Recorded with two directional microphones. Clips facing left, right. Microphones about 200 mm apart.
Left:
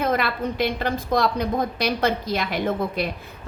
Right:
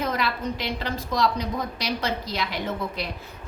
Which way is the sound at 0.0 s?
55° left (ahead or behind).